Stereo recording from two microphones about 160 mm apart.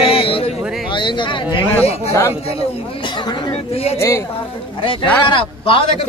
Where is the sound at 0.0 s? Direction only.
35° left (ahead or behind).